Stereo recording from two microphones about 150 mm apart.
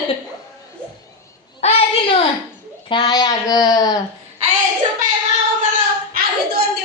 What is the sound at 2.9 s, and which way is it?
Speech, 30° left (ahead or behind).